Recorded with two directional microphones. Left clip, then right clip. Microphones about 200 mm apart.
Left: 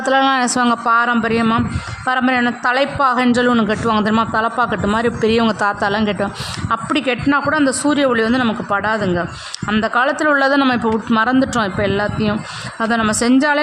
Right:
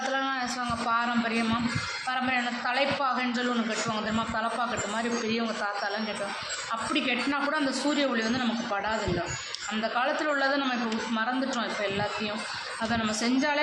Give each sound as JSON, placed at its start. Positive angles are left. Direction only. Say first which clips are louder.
{"t": 0.1, "sound": "speech", "louder": "left 15 dB", "side_deg": 60}